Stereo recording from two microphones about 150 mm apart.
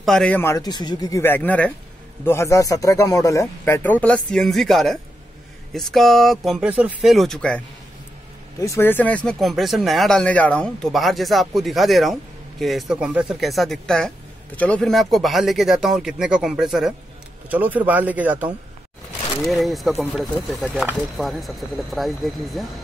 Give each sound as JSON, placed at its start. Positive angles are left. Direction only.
{"t": 0.0, "sound": "speech", "side_deg": 5}
{"t": 0.4, "sound": "a man's voice", "side_deg": 20}
{"t": 8.5, "sound": "speech", "side_deg": 20}
{"t": 19.4, "sound": "speech", "side_deg": 0}